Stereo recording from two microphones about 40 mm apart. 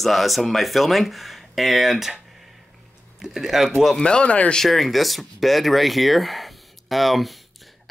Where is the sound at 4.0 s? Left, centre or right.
Left.